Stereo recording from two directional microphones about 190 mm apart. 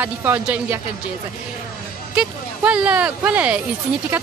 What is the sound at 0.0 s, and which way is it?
Speech, 10° right (ahead or behind).